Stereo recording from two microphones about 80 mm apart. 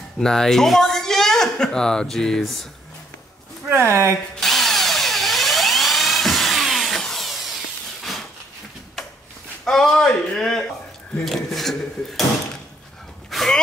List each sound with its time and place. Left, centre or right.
0.2 s speech: centre
3.6 s speech: right
4.4 s drill: centre
8.0 s a sound: centre
9.7 s a man's voice: centre
13.3 s a sound: centre